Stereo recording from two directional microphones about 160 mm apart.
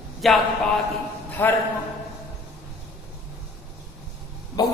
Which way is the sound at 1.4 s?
15° left (ahead or behind).